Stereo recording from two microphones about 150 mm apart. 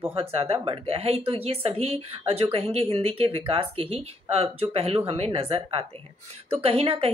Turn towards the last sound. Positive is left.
turn(degrees=-40)  # may be behind; listen again after turning